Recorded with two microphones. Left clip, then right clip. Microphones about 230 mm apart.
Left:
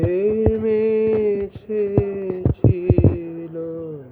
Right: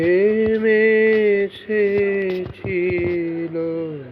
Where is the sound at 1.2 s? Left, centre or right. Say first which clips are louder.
Right 4 dB; centre.